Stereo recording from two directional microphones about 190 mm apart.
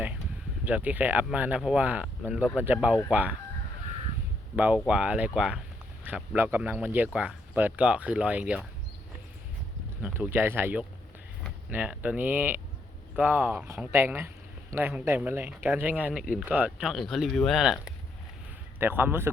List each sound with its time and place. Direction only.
0.6 s speech: 10° right (ahead or behind)
4.5 s speech: 5° right (ahead or behind)
10.0 s speech: 10° right (ahead or behind)